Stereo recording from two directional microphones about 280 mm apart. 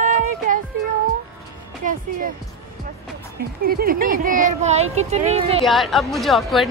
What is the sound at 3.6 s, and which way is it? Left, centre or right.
Speech, right.